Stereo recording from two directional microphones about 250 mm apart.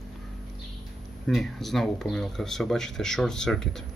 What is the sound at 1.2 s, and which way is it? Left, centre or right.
Speech, centre.